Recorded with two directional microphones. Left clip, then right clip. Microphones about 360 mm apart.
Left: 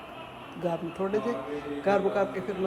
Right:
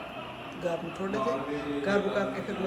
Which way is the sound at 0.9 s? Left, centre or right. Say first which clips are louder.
Left 1 dB; centre.